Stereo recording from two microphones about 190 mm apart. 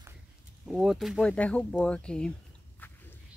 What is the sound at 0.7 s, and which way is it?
Speech, centre (ahead or behind).